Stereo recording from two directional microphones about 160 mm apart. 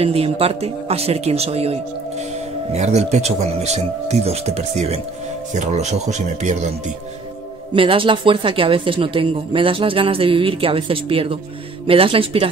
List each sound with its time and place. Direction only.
0.0 s speech: 40° right (ahead or behind)
7.7 s speech: 35° right (ahead or behind)